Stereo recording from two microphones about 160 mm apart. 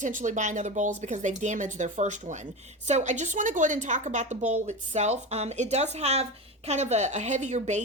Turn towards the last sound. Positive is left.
turn(degrees=-45)  # may be behind; listen again after turning